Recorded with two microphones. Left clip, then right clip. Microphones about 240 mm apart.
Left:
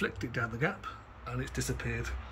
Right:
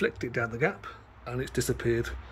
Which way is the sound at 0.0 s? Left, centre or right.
Centre.